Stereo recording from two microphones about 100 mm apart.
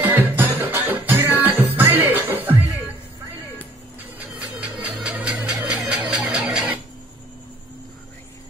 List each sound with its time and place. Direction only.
0.0 s music: 20° right (ahead or behind)
4.4 s music: 15° right (ahead or behind)
6.3 s squeal: 5° right (ahead or behind)